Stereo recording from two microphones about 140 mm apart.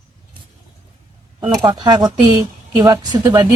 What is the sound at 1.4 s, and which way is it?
Speech, 30° right (ahead or behind).